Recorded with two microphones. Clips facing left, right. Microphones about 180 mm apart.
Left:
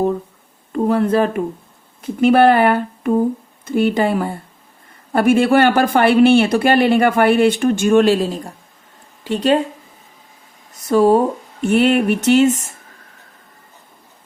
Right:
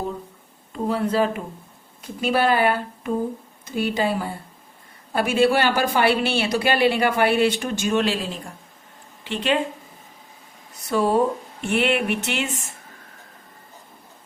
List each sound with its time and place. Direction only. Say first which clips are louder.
0.7 s speech: left 7 dB; 55° left (ahead or behind); by 9.6 s 40° left (ahead or behind)
10.8 s speech: left 7 dB; 45° left (ahead or behind)